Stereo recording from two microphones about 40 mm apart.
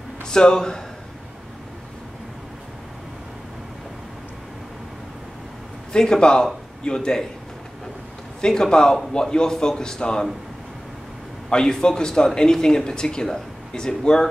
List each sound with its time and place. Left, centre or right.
0.2 s speech: centre
5.9 s speech: centre
8.4 s speech: centre
11.5 s speech: centre